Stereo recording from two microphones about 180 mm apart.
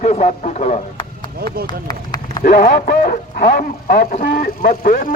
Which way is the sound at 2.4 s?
55° left (ahead or behind).